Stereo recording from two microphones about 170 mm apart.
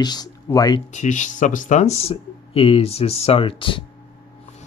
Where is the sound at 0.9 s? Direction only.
45° left (ahead or behind); by 3.8 s 30° left (ahead or behind).